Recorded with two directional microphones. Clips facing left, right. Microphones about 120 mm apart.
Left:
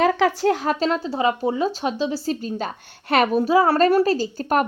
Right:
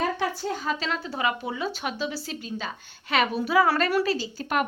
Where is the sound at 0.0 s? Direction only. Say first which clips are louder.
Left 9 dB; 90° left; by 0.8 s 70° left (ahead or behind).